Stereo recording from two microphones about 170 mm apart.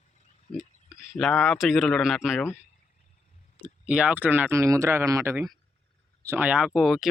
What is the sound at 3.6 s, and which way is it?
Speech, 5° right (ahead or behind).